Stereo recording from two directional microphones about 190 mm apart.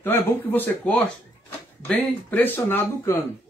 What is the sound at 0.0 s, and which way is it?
Speech, 10° left (ahead or behind).